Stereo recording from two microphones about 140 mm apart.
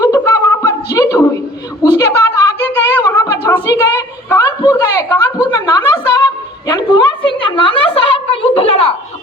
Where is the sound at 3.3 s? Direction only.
25° left (ahead or behind); by 8.9 s 40° left (ahead or behind).